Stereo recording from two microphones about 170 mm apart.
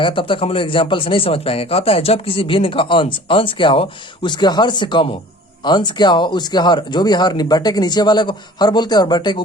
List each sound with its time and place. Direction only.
0.0 s speech: 30° left (ahead or behind)